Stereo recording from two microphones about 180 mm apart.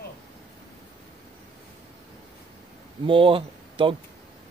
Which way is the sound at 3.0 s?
30° right (ahead or behind).